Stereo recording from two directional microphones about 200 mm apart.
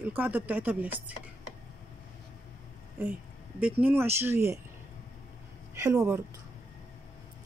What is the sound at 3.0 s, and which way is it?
Speech, 10° right (ahead or behind).